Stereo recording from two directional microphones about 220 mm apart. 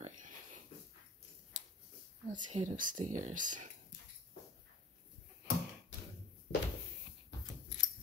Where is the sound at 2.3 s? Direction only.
30° right (ahead or behind).